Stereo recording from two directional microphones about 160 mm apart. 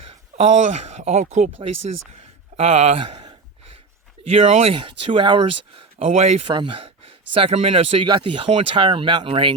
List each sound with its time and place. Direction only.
0.0 s speech: 40° right (ahead or behind)
6.0 s speech: 40° right (ahead or behind)
6.5 s speech: 30° right (ahead or behind)